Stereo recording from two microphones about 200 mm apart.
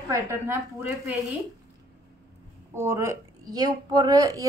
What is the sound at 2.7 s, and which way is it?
A woman's voice, 15° right (ahead or behind).